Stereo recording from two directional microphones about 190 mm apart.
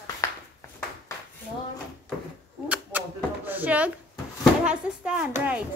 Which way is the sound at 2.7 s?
10° right (ahead or behind).